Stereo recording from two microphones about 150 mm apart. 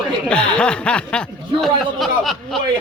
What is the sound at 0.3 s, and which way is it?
Speech, 5° left (ahead or behind).